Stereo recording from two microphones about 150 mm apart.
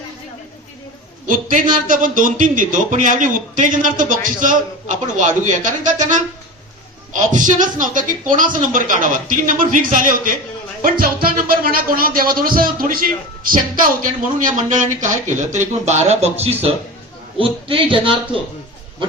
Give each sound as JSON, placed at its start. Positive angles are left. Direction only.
{"t": 1.3, "sound": "speech", "side_deg": -60}